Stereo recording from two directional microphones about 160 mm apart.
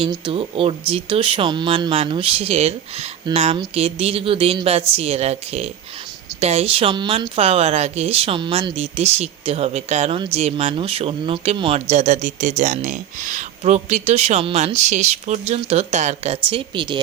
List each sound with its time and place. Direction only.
0.3 s speech: 35° right (ahead or behind)
11.9 s speech: 45° right (ahead or behind); by 17.0 s 30° right (ahead or behind)